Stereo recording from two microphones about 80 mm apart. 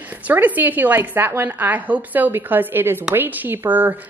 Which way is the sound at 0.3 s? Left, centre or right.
Right.